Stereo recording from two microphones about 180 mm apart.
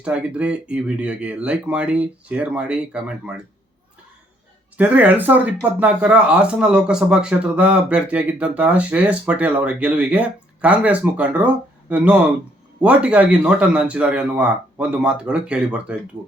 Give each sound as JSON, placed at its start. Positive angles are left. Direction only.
{"t": 0.0, "sound": "speech", "side_deg": -5}
{"t": 4.8, "sound": "a man's voice", "side_deg": -10}